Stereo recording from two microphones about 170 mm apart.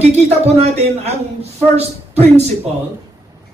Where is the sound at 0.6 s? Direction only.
40° right (ahead or behind).